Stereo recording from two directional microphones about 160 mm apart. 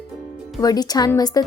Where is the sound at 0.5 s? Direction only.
25° left (ahead or behind).